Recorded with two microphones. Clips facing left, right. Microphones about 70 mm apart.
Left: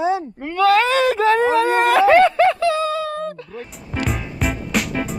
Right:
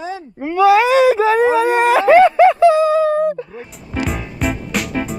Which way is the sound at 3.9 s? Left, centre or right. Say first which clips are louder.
Right 2 dB; centre.